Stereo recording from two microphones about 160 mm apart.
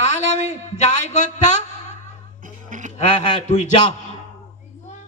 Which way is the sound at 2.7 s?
50° right (ahead or behind).